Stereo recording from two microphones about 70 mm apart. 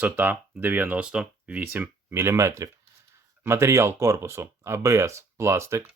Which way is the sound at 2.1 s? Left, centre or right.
Right.